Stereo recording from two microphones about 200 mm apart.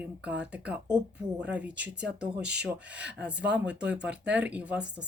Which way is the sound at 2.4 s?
60° right (ahead or behind).